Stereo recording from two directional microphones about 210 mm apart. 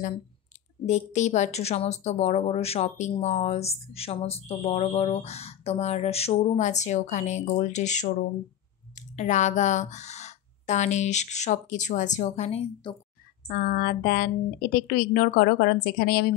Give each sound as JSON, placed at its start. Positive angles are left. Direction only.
{"t": 0.8, "sound": "speech", "side_deg": 35}
{"t": 13.5, "sound": "a woman's voice", "side_deg": 40}